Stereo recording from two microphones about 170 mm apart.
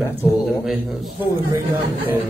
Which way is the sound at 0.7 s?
Centre (ahead or behind).